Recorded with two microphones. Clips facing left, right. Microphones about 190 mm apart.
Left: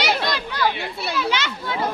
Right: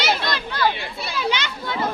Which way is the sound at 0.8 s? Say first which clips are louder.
Left 3 dB; 65° left (ahead or behind).